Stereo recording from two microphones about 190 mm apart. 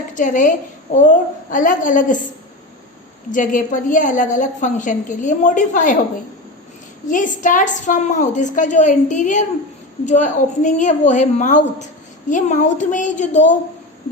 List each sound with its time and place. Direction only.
0.1 s a woman's voice: 40° left (ahead or behind)
3.3 s a woman's voice: 45° left (ahead or behind)
7.1 s a woman's voice: 40° left (ahead or behind)